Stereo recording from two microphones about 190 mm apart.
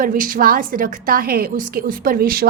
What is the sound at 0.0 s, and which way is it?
A woman's voice, 45° right (ahead or behind).